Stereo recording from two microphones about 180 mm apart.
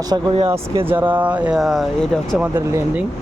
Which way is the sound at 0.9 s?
10° right (ahead or behind).